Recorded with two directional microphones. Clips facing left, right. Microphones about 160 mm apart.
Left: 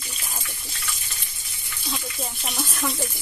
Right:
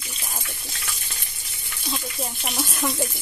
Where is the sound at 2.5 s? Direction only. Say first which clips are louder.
Right 2 dB; 5° right (ahead or behind).